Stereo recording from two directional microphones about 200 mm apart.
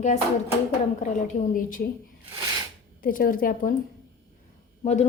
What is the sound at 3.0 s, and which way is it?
Speech, 45° left (ahead or behind).